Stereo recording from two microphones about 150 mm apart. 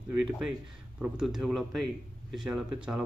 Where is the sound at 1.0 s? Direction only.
5° right (ahead or behind).